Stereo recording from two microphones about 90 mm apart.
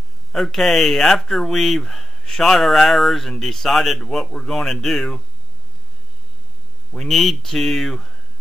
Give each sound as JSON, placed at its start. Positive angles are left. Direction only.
{"t": 0.3, "sound": "speech", "side_deg": 0}
{"t": 6.9, "sound": "speech", "side_deg": 0}